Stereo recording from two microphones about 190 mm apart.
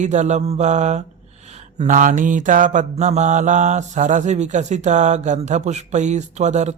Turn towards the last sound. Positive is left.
turn(degrees=-40)  # may be behind; listen again after turning